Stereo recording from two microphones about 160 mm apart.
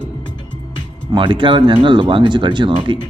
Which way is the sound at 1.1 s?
30° right (ahead or behind).